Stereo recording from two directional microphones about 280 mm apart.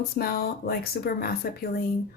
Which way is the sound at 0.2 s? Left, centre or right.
Left.